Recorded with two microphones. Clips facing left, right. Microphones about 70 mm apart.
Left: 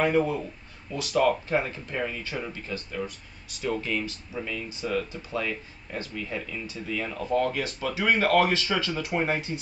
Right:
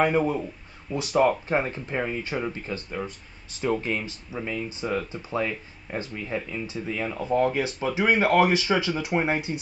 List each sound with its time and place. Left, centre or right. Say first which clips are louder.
0.0 s speech: right 1 dB; right